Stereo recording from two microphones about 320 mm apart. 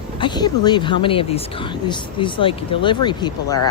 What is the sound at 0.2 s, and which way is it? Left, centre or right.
Speech, centre.